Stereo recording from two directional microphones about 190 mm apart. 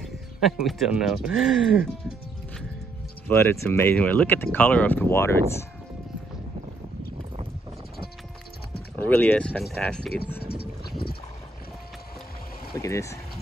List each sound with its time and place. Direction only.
0.0 s speech: centre (ahead or behind)
3.3 s speech: 10° left (ahead or behind)
8.9 s speech: 10° left (ahead or behind)
10.5 s a sound: 55° left (ahead or behind)
12.7 s speech: 15° left (ahead or behind)